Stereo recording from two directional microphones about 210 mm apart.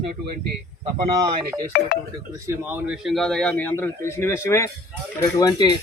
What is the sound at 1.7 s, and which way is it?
Speech, 45° left (ahead or behind).